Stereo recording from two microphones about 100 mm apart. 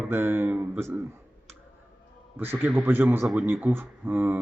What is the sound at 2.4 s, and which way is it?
Speech, 20° right (ahead or behind).